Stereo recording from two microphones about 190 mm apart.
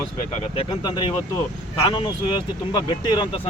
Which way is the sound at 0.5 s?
25° left (ahead or behind).